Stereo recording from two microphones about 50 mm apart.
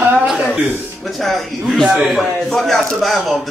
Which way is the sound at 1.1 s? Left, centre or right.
Centre.